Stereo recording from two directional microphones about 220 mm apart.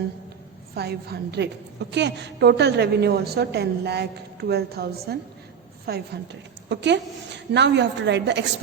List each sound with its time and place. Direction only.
0.8 s a woman's voice: 45° right (ahead or behind)